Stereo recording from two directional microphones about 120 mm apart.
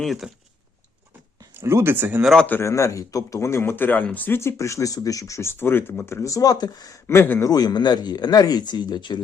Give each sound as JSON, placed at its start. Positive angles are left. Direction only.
{"t": 0.0, "sound": "a man's voice", "side_deg": 0}
{"t": 1.5, "sound": "speech", "side_deg": -20}
{"t": 2.2, "sound": "a man's voice", "side_deg": 5}
{"t": 2.5, "sound": "speech", "side_deg": 20}
{"t": 7.5, "sound": "speech", "side_deg": 35}